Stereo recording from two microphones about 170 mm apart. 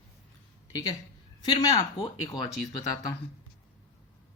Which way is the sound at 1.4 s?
25° left (ahead or behind).